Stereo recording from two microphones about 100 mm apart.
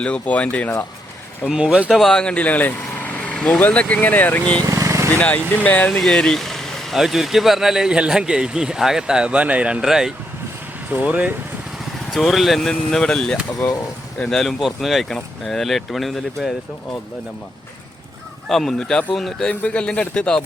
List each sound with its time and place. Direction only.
0.0 s speech: 10° left (ahead or behind)
1.5 s speech: 10° right (ahead or behind)
2.0 s speech: 5° left (ahead or behind)
4.6 s vehicle: 30° right (ahead or behind)
5.1 s speech: 15° left (ahead or behind)
6.0 s speech: 5° left (ahead or behind); by 11.3 s 15° right (ahead or behind)
12.1 s speech: centre (ahead or behind)
18.4 s speech: 5° left (ahead or behind)